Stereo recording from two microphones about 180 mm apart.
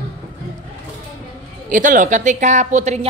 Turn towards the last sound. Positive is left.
turn(degrees=-40)  # may be behind; listen again after turning